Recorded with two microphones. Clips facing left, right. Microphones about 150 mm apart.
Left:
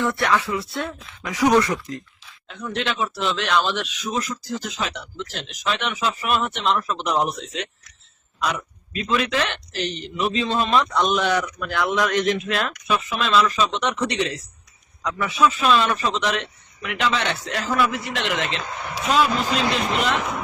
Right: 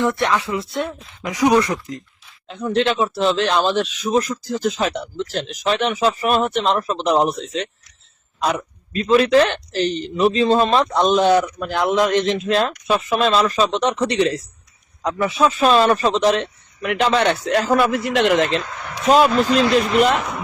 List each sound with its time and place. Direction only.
0.0 s speech: 20° right (ahead or behind)
2.5 s speech: 30° right (ahead or behind)
18.8 s speech: 10° left (ahead or behind)
19.0 s speech: 45° right (ahead or behind)